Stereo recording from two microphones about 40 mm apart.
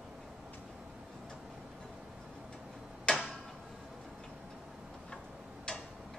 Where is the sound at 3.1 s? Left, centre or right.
Left.